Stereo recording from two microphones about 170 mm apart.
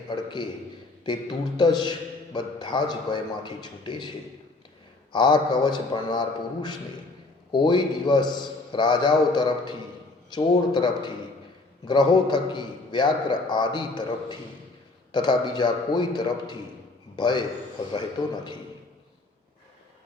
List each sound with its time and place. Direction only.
0.1 s a man's voice: 25° left (ahead or behind)
5.1 s a man's voice: 25° left (ahead or behind)